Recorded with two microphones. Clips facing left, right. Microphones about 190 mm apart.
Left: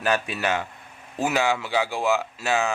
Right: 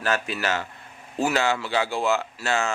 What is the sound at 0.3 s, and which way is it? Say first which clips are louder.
Speech: left 1 dB; 20° left (ahead or behind).